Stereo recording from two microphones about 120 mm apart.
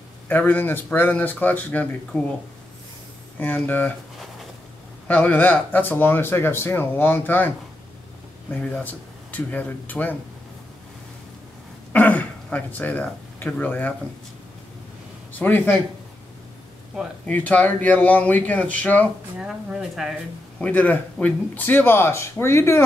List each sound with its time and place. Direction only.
0.3 s speech: 15° left (ahead or behind)
3.3 s speech: 15° left (ahead or behind)
5.0 s speech: 15° left (ahead or behind)
8.5 s speech: 10° left (ahead or behind)
11.9 s speech: 15° left (ahead or behind)
15.3 s speech: 15° left (ahead or behind)
17.3 s speech: 15° left (ahead or behind)
19.3 s speech: 5° right (ahead or behind)
20.6 s speech: 15° left (ahead or behind)